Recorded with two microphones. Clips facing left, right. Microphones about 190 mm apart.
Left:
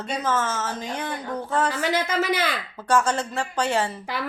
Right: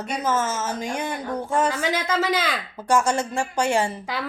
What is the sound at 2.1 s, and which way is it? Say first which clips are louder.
Speech: right 1 dB; 90° right.